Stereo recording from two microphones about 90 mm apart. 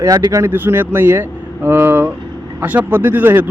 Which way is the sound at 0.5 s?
20° right (ahead or behind).